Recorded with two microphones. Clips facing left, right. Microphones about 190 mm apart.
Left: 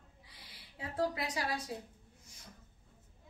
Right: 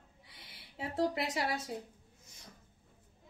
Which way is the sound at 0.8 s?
25° right (ahead or behind).